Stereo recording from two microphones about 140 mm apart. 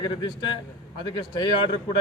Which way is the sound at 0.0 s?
30° left (ahead or behind).